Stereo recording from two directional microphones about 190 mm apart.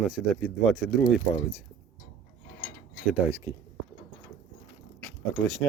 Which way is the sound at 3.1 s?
15° right (ahead or behind).